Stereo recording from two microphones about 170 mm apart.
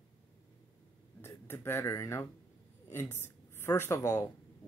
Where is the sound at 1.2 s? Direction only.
15° left (ahead or behind).